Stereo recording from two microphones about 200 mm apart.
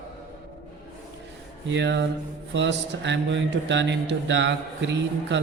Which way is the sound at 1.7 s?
60° right (ahead or behind).